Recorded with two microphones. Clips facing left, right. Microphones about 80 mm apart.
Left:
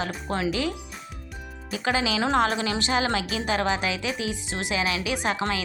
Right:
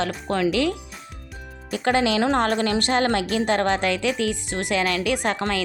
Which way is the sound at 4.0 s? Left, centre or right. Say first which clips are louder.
Right 6 dB; right.